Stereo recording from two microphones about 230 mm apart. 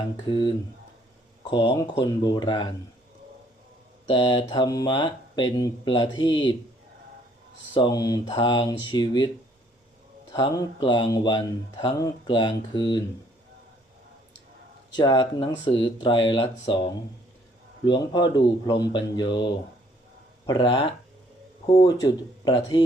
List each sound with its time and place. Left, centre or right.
0.3 s speech: centre
4.0 s speech: left
7.7 s speech: centre
10.3 s speech: centre
14.9 s speech: centre
17.8 s speech: centre
20.5 s speech: left